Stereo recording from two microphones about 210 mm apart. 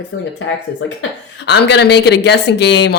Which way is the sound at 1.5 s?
55° left (ahead or behind).